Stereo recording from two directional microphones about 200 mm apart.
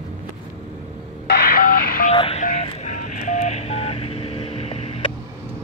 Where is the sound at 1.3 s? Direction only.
50° left (ahead or behind).